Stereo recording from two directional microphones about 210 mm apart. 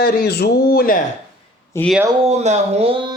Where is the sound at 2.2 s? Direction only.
30° right (ahead or behind).